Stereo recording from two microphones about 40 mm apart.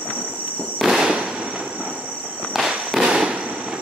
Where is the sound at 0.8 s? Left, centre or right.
Centre.